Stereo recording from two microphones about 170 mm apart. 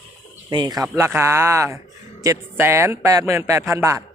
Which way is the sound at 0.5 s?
25° right (ahead or behind).